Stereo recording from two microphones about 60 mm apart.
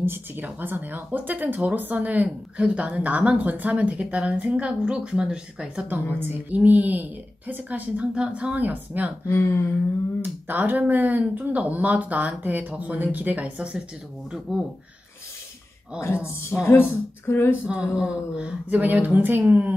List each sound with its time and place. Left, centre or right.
0.0 s speech: right; by 5.9 s centre
6.1 s speech: right
9.3 s speech: left
10.2 s speech: right; by 14.7 s centre
16.6 s speech: left
17.6 s speech: centre